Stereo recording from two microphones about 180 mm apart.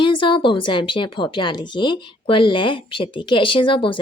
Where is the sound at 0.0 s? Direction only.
30° left (ahead or behind).